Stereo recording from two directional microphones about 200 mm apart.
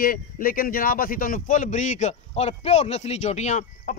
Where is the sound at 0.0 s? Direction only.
45° left (ahead or behind).